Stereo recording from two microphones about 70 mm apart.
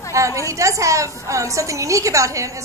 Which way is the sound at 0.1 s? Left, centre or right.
Right.